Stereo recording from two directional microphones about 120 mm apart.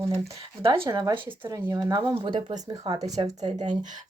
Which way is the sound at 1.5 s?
30° right (ahead or behind).